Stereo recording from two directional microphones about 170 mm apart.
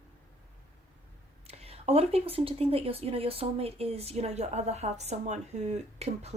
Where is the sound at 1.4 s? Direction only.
35° right (ahead or behind).